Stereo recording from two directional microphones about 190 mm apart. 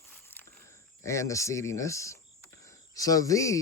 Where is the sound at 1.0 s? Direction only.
15° left (ahead or behind).